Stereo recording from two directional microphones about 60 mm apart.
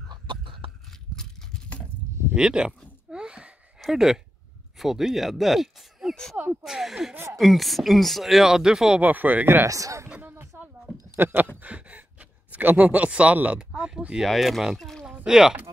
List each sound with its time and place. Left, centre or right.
1.1 s a sound: centre
2.3 s speech: centre
3.1 s a sound: centre
3.8 s speech: centre
6.3 s speech: right
6.6 s speech: centre
9.0 s speech: right
9.7 s speech: right
10.3 s a sound: right
11.1 s speech: right
11.6 s gasp: right
13.7 s speech: centre
14.2 s speech: centre